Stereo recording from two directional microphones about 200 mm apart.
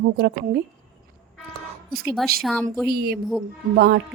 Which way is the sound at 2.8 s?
50° right (ahead or behind).